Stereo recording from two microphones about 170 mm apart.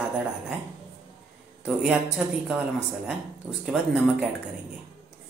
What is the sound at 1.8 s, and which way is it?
Speech, 5° right (ahead or behind).